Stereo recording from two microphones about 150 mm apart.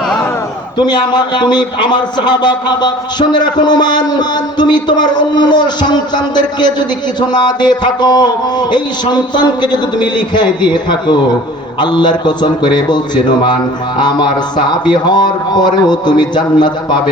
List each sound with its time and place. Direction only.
0.8 s a man's voice: 30° left (ahead or behind)
14.0 s a man's voice: 30° left (ahead or behind)